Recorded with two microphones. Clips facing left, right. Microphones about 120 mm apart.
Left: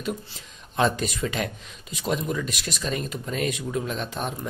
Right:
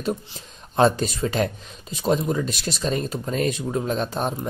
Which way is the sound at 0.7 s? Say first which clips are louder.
Right 5 dB; 35° right (ahead or behind).